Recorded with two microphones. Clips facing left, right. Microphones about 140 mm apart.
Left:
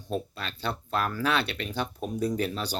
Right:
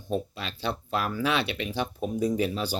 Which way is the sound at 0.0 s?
5° right (ahead or behind).